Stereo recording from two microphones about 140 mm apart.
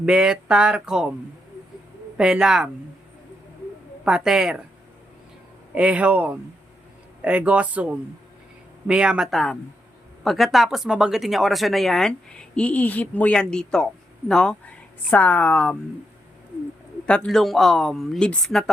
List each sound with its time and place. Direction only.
0.0 s speech: 5° right (ahead or behind)
2.1 s speech: 5° right (ahead or behind)
4.0 s speech: 5° right (ahead or behind)
5.7 s speech: 10° right (ahead or behind); by 15.8 s 5° left (ahead or behind)
17.1 s speech: 5° left (ahead or behind)